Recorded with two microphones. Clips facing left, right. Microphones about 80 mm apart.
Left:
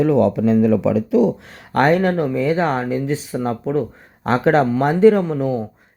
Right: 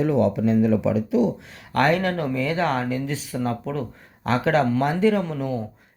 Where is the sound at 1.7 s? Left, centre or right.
Left.